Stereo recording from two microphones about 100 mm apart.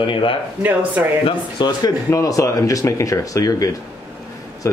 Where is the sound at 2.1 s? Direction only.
35° left (ahead or behind).